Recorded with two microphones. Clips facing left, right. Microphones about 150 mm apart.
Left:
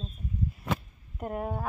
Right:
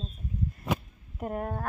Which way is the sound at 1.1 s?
Centre (ahead or behind).